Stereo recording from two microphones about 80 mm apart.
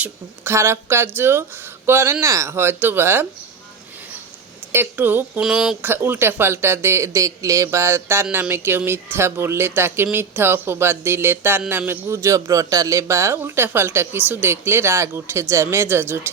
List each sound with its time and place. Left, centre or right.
0.4 s a man's voice: right
4.7 s speech: right
5.4 s speech: centre
5.8 s a man's voice: right
12.0 s a man's voice: right